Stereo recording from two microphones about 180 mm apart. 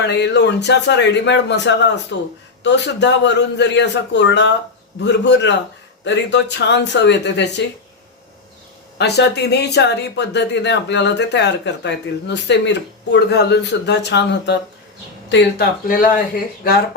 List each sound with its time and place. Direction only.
0.0 s speech: 70° left (ahead or behind)
9.0 s speech: 70° left (ahead or behind)